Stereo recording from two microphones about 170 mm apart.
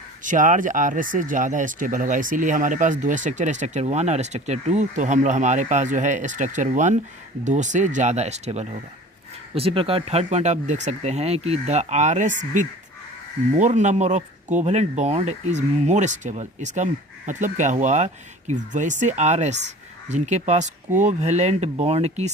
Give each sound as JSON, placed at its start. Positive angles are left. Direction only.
{"t": 0.3, "sound": "speech", "side_deg": -50}